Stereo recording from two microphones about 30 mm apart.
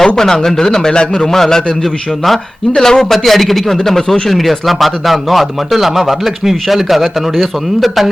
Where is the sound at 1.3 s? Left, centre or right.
Centre.